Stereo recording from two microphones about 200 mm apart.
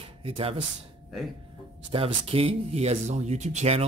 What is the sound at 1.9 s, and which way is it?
A man's voice, 25° right (ahead or behind).